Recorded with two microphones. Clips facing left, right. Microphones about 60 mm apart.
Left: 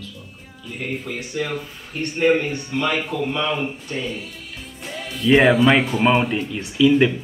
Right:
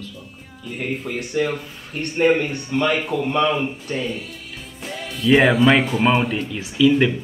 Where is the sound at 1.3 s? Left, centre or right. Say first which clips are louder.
Right 4 dB; right.